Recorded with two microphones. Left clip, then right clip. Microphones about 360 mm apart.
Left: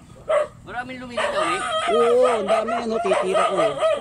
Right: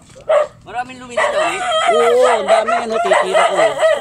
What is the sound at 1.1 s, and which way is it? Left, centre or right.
Speech, centre.